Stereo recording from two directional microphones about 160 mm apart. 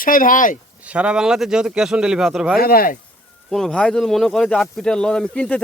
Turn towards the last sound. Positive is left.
turn(degrees=5)  # may be behind; listen again after turning